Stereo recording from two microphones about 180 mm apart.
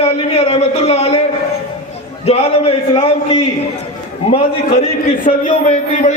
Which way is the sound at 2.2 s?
35° left (ahead or behind).